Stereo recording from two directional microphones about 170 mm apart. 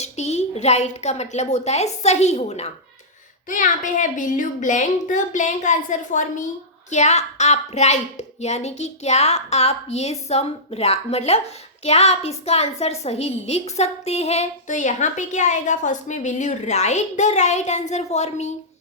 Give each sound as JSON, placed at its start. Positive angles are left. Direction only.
{"t": 0.0, "sound": "a woman's voice", "side_deg": 40}